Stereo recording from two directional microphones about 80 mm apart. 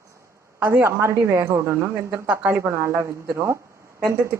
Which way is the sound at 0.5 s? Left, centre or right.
Right.